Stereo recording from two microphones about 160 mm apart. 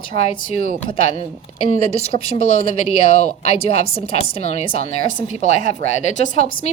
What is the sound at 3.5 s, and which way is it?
Speech, 40° left (ahead or behind).